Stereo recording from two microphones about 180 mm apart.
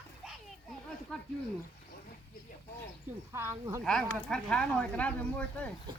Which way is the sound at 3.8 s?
5° left (ahead or behind).